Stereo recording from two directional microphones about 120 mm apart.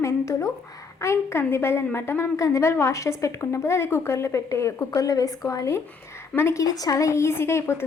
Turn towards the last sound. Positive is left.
turn(degrees=20)  # may be behind; listen again after turning